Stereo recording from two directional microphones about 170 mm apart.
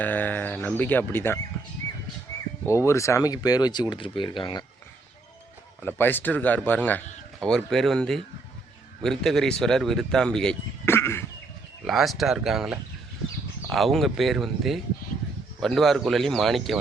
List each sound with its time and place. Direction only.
0.0 s speech: 10° left (ahead or behind)
2.6 s speech: 15° left (ahead or behind)
5.8 s speech: 10° left (ahead or behind)
11.9 s speech: centre (ahead or behind)